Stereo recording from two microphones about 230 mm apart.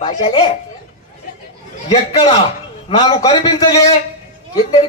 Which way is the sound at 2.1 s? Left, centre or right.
Centre.